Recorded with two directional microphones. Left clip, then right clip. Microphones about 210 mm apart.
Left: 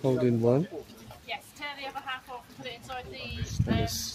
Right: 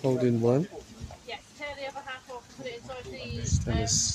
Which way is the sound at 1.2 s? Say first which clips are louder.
Left 1 dB; 50° left (ahead or behind).